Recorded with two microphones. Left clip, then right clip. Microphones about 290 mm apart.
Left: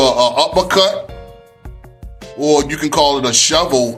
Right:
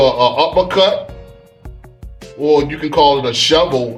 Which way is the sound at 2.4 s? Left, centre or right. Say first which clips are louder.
Even; left.